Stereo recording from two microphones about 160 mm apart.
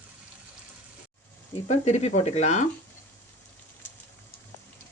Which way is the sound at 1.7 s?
45° left (ahead or behind).